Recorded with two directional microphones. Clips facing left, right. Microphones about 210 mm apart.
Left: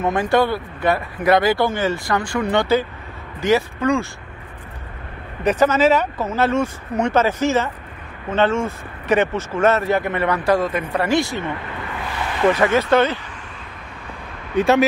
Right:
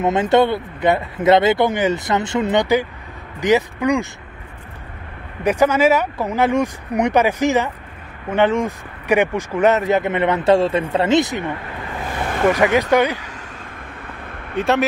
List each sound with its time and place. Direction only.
0.0 s speech: 20° right (ahead or behind)
5.4 s speech: 10° right (ahead or behind)
12.0 s a sound: 45° right (ahead or behind)
12.5 s speech: 15° right (ahead or behind)
14.5 s speech: centre (ahead or behind)